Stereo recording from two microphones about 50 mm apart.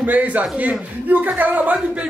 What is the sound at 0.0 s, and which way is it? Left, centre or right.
A man's voice, right.